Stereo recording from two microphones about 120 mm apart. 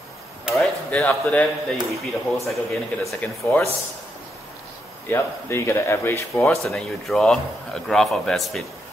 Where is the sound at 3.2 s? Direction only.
15° left (ahead or behind).